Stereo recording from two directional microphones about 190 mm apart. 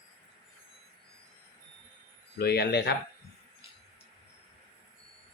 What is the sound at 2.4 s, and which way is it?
Speech, 60° left (ahead or behind).